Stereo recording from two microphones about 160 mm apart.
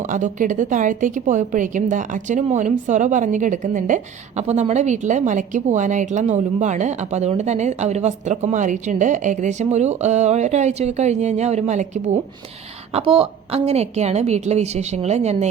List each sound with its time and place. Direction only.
0.1 s a woman's voice: 55° right (ahead or behind)
12.9 s a woman's voice: 35° right (ahead or behind)